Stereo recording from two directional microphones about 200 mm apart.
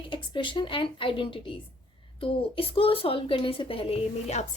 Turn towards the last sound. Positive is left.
turn(degrees=30)  # may be behind; listen again after turning